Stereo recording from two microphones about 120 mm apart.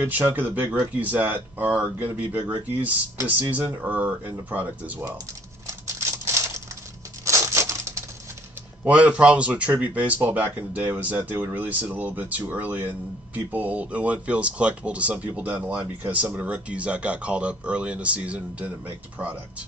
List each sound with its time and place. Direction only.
0.0 s speech: 15° right (ahead or behind)
7.2 s a sound: 25° right (ahead or behind)
8.8 s speech: 10° right (ahead or behind)